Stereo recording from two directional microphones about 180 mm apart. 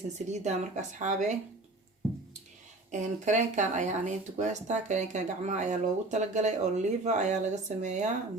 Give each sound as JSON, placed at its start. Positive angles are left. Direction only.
{"t": 0.3, "sound": "speech", "side_deg": -40}
{"t": 2.9, "sound": "speech", "side_deg": -40}